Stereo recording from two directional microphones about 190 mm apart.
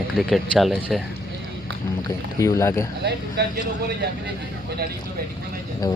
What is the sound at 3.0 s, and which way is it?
Speech, 60° right (ahead or behind).